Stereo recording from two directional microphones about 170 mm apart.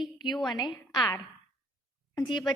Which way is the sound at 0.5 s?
25° left (ahead or behind).